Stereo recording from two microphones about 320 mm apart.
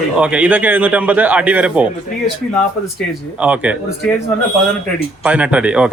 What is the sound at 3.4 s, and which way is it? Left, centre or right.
Speech, centre.